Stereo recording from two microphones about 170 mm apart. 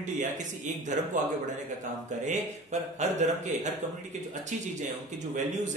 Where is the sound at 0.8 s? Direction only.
45° right (ahead or behind).